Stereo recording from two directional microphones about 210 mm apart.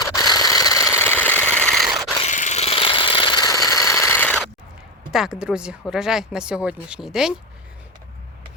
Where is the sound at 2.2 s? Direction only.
35° left (ahead or behind); by 4.5 s 5° left (ahead or behind).